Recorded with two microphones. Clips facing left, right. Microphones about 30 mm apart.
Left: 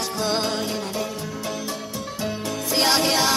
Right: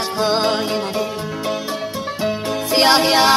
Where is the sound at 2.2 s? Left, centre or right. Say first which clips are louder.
Right 6 dB; right.